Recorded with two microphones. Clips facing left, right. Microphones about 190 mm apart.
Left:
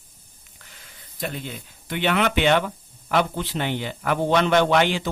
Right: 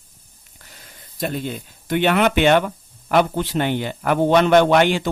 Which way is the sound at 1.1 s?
40° right (ahead or behind).